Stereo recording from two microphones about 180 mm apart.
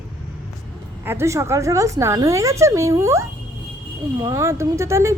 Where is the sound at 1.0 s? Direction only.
15° right (ahead or behind).